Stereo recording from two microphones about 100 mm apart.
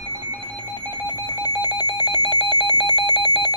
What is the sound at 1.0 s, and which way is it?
Alarm clock, 40° left (ahead or behind).